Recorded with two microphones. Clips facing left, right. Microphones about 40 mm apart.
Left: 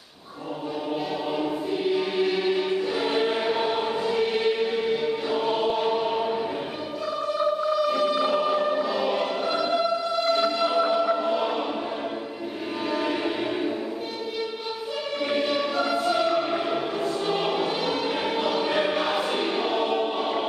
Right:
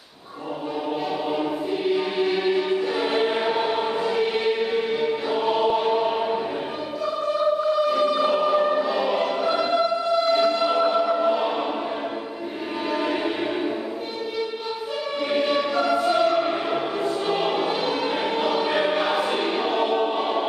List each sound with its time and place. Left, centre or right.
1.4 s choir: centre
7.9 s choir: centre
10.3 s train: centre
12.9 s music: centre
15.3 s choir: centre